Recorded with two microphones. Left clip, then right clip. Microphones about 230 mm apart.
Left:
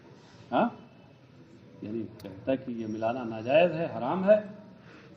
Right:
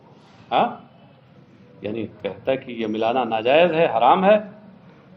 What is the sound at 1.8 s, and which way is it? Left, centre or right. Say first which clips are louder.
A man's voice: right 11 dB; right.